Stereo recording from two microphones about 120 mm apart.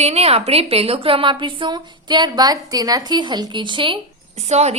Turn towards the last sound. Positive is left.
turn(degrees=-65)  # may be behind; listen again after turning